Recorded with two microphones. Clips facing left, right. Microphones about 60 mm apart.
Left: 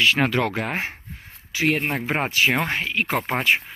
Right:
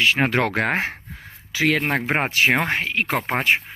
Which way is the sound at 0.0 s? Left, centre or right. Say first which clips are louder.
Even; centre.